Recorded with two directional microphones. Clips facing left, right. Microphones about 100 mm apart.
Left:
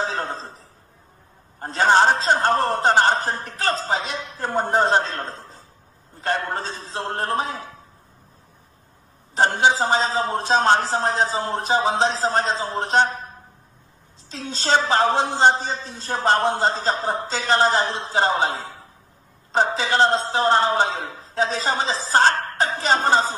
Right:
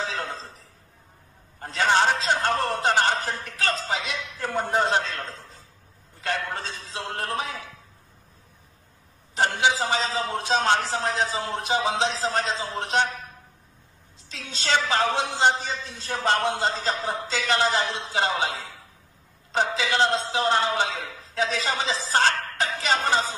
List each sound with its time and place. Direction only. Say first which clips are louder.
0.0 s chuckle: left 4 dB; 35° left (ahead or behind)
1.6 s a man's voice: left 5 dB; 35° left (ahead or behind)
9.3 s a man's voice: left 4 dB; 35° left (ahead or behind)